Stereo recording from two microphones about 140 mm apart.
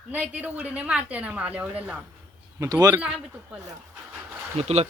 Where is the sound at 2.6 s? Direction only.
25° right (ahead or behind).